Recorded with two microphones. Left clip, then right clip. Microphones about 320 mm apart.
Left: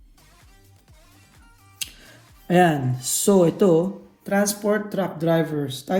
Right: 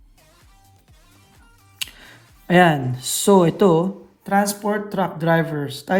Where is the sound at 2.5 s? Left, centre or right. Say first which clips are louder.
Right 3 dB; right.